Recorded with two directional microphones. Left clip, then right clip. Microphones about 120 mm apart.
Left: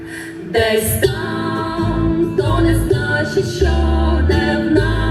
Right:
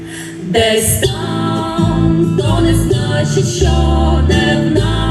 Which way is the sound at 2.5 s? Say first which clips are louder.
Right 3 dB; 20° right (ahead or behind).